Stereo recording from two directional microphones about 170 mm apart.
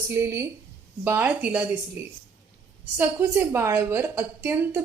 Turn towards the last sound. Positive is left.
turn(degrees=-15)  # may be behind; listen again after turning